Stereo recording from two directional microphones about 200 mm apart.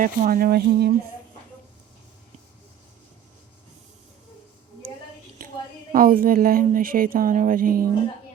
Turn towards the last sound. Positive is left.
turn(degrees=-45)  # may be behind; listen again after turning